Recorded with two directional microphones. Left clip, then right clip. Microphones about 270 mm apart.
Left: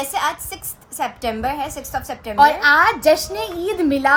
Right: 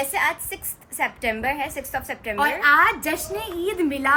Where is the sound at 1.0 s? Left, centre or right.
Centre.